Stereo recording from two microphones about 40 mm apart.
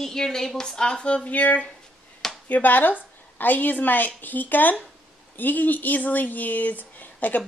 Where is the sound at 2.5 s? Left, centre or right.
Left.